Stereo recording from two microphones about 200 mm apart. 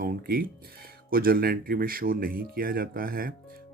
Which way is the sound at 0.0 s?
45° right (ahead or behind).